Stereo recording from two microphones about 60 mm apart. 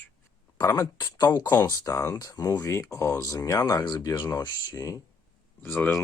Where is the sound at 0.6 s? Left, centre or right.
Left.